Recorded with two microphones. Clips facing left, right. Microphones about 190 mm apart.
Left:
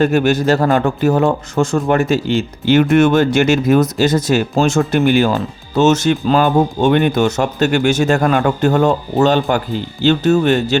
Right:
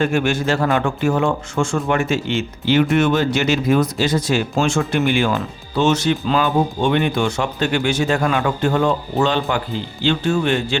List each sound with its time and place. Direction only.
0.0 s a man's voice: 40° left (ahead or behind)